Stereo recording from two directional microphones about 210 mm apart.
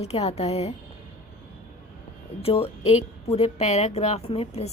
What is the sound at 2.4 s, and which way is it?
A woman's voice, 30° left (ahead or behind).